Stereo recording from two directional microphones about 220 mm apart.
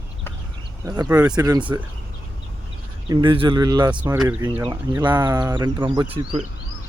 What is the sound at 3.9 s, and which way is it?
Speech, 5° right (ahead or behind).